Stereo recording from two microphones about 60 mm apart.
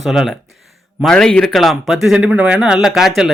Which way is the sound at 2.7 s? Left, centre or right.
Centre.